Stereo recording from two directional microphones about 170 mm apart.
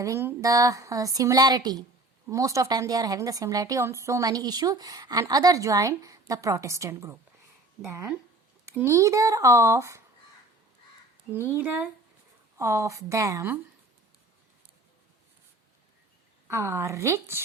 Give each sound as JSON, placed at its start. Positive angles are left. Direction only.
{"t": 0.0, "sound": "a woman's voice", "side_deg": -15}
{"t": 11.3, "sound": "a woman's voice", "side_deg": -10}
{"t": 16.5, "sound": "speech", "side_deg": -15}